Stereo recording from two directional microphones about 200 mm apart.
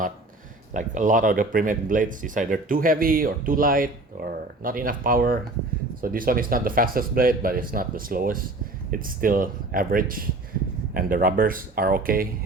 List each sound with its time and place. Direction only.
0.7 s speech: 40° right (ahead or behind)